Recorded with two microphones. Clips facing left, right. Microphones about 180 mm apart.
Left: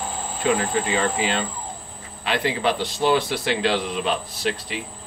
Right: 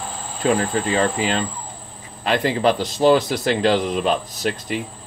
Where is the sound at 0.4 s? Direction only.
40° right (ahead or behind).